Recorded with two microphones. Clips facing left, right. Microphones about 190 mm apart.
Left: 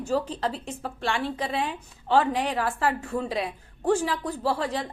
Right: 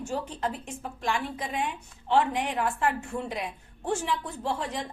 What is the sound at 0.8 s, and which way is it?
Speech, 80° left.